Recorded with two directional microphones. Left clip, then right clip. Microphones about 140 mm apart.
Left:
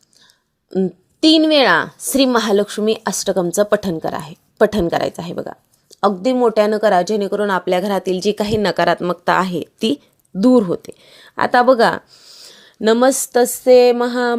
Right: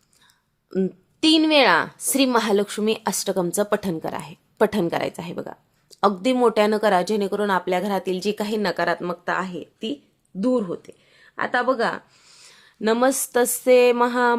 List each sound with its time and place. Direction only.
0.7 s a woman's voice: 25° left (ahead or behind); by 9.1 s 45° left (ahead or behind)
9.2 s speech: 70° left (ahead or behind); by 10.0 s 90° left
10.4 s speech: 65° left (ahead or behind)
12.1 s a sound: 25° left (ahead or behind)
12.5 s a woman's voice: 40° left (ahead or behind); by 14.3 s 20° left (ahead or behind)